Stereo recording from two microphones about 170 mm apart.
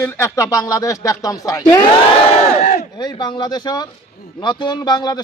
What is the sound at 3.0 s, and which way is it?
Speech, 25° left (ahead or behind).